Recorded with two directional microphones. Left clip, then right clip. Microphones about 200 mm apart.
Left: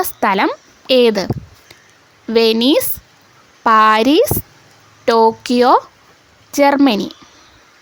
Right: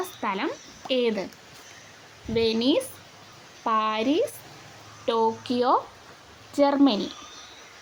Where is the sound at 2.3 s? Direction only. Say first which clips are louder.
Left 11 dB; 60° left (ahead or behind).